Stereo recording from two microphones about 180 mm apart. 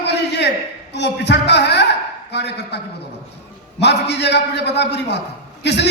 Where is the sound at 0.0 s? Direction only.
70° left (ahead or behind).